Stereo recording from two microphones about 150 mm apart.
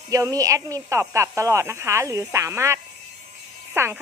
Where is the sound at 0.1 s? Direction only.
25° right (ahead or behind).